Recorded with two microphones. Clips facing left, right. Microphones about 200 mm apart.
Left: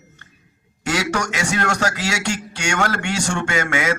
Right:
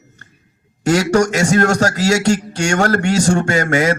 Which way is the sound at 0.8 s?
40° right (ahead or behind).